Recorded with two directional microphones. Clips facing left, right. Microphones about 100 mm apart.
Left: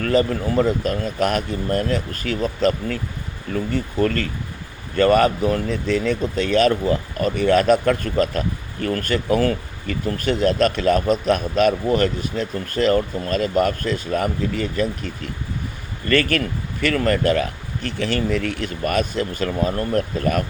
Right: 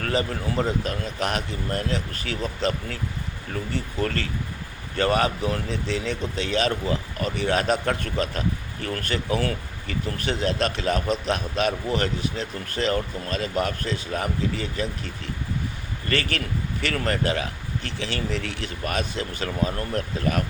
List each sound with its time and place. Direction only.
0.1 s speech: 45° left (ahead or behind)
4.0 s speech: 45° left (ahead or behind)
16.0 s speech: 50° left (ahead or behind)